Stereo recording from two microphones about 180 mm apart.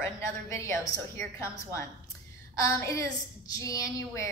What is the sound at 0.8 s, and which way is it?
Speech, 15° left (ahead or behind).